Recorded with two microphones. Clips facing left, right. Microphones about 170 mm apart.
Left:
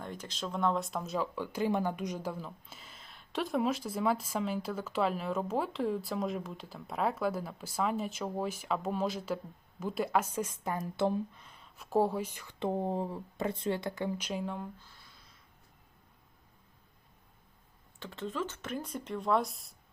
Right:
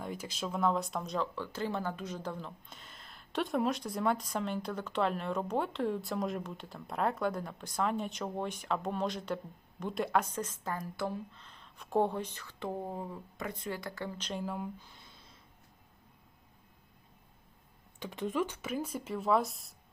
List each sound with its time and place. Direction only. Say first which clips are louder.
0.0 s speech: right 1 dB; 10° right (ahead or behind); by 11.2 s 25° left (ahead or behind)
11.3 s speech: even; 10° left (ahead or behind)
14.4 s speech: even; 5° right (ahead or behind)
14.8 s a sound: right 3 dB; 20° right (ahead or behind)
18.0 s speech: right 3 dB; 15° right (ahead or behind); by 19.7 s centre (ahead or behind)